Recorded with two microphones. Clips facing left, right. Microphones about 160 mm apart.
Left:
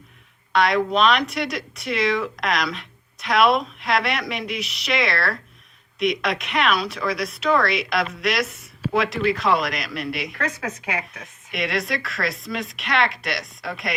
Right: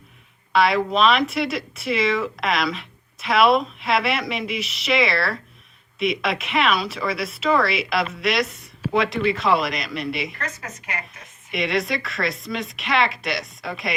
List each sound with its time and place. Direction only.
0.5 s speech: 5° right (ahead or behind)
10.3 s speech: 80° left
11.5 s speech: centre (ahead or behind)